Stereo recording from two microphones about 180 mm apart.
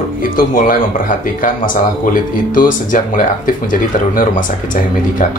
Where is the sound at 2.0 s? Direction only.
50° left (ahead or behind).